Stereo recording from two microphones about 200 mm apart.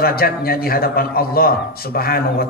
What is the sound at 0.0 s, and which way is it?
A man's voice, 50° left (ahead or behind).